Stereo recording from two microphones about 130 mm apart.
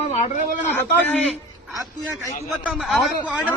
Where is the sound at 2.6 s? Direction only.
5° right (ahead or behind).